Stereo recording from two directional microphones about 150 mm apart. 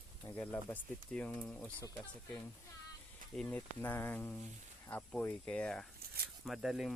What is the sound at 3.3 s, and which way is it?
Speech, 5° left (ahead or behind).